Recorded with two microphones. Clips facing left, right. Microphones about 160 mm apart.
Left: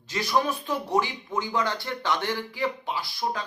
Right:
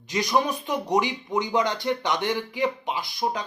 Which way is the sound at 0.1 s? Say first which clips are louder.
Right 2 dB; 15° right (ahead or behind).